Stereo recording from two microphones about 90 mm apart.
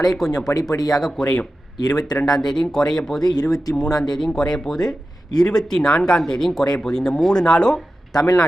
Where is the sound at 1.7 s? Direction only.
50° left (ahead or behind).